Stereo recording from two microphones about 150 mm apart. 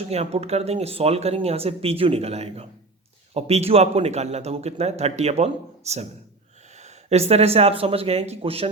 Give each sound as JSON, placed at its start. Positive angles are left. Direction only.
{"t": 0.1, "sound": "a man's voice", "side_deg": -45}